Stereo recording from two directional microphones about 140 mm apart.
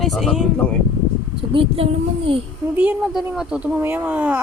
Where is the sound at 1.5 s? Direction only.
40° right (ahead or behind).